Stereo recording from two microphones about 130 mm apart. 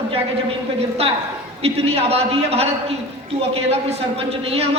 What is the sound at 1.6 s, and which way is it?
A man's voice, 50° right (ahead or behind).